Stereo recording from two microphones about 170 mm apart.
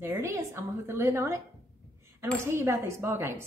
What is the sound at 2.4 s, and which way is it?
Speech, 15° right (ahead or behind).